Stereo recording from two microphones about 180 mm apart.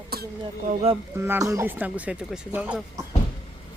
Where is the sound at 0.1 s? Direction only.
60° right (ahead or behind).